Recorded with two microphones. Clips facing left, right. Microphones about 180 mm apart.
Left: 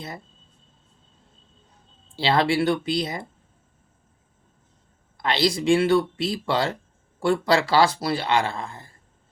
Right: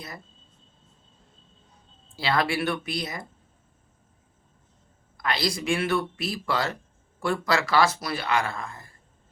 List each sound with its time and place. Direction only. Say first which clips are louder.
2.1 s speech: left 5 dB; 25° left (ahead or behind)
5.1 s speech: left 5 dB; 25° left (ahead or behind)